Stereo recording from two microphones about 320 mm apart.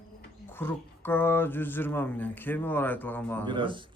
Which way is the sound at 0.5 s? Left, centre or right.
Centre.